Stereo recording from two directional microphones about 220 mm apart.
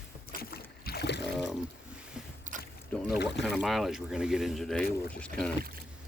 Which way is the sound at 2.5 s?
35° right (ahead or behind).